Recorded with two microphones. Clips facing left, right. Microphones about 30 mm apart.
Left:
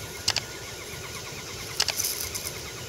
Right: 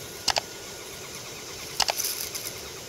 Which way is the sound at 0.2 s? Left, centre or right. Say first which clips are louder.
Right 2 dB; centre.